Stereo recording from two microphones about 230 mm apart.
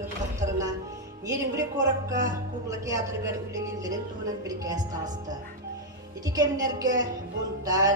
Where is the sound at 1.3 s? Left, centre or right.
Centre.